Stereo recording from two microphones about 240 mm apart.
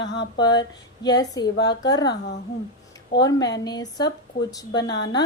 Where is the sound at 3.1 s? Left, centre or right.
Left.